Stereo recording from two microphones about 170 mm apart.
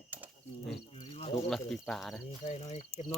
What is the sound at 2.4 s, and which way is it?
Speech, 40° left (ahead or behind).